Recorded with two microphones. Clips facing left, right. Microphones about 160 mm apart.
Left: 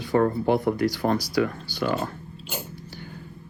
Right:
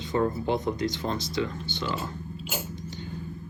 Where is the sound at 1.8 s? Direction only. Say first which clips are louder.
Left 7 dB; 60° left (ahead or behind).